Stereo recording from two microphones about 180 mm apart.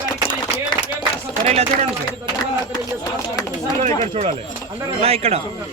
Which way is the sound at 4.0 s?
35° right (ahead or behind).